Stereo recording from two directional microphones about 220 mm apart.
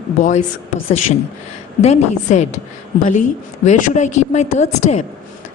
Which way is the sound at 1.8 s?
30° left (ahead or behind).